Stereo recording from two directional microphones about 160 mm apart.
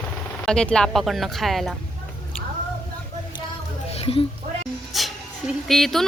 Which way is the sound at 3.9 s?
40° left (ahead or behind).